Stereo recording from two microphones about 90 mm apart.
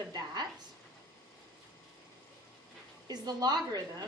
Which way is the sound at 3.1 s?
45° right (ahead or behind).